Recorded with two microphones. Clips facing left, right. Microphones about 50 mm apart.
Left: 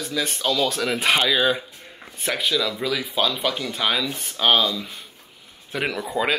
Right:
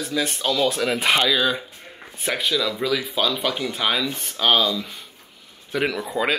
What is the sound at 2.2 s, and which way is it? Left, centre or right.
Speech, centre.